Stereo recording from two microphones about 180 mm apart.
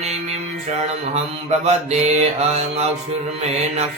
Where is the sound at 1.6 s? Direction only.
40° right (ahead or behind).